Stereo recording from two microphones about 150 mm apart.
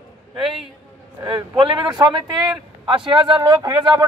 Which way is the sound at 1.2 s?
30° right (ahead or behind).